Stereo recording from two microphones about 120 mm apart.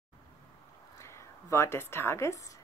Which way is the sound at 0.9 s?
25° left (ahead or behind).